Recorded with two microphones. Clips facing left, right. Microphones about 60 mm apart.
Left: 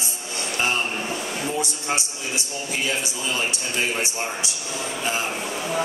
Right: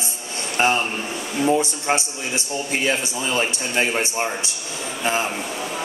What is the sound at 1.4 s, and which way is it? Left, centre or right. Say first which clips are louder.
A man's voice: right 9 dB; right.